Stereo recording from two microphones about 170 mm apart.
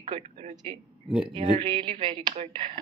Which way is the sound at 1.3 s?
30° right (ahead or behind).